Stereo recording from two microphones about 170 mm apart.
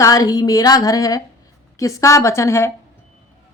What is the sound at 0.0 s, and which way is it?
A woman's voice, 20° left (ahead or behind).